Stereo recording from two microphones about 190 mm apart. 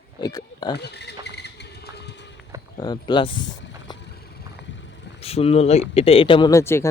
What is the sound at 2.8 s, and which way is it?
Speech, 25° left (ahead or behind).